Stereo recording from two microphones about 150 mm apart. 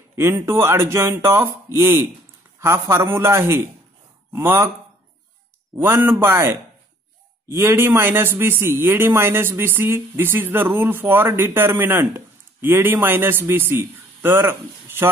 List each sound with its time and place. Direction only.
0.1 s a man's voice: 15° right (ahead or behind)
5.8 s a man's voice: 15° right (ahead or behind)